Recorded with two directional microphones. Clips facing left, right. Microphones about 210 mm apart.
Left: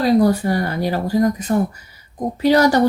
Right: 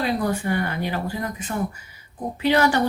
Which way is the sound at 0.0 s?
40° left (ahead or behind).